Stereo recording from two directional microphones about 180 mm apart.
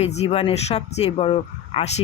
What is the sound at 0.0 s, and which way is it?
Speech, 35° left (ahead or behind).